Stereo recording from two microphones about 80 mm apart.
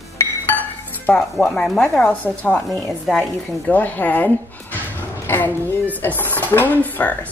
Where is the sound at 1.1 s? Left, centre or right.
Centre.